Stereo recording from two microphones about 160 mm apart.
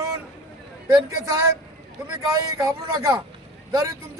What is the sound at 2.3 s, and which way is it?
Speech, 20° right (ahead or behind).